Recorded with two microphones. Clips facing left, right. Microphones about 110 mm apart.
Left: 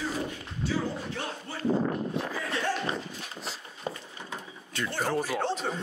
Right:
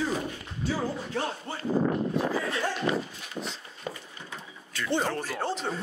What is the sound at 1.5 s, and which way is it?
Speech, 25° right (ahead or behind).